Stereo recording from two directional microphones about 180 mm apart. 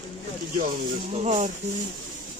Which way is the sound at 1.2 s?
40° right (ahead or behind).